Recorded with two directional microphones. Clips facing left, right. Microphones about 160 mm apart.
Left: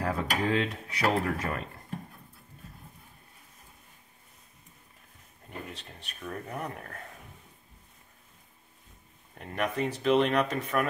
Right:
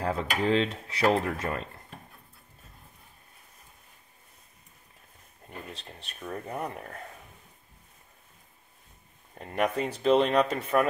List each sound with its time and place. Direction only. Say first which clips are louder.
0.0 s dishes: right 1 dB; 30° right (ahead or behind)
5.7 s dishes: right 1 dB; 30° right (ahead or behind)
9.4 s speech: right 2 dB; 35° right (ahead or behind)